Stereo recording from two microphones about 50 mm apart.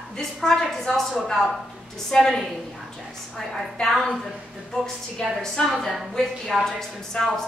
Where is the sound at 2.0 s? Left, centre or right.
Centre.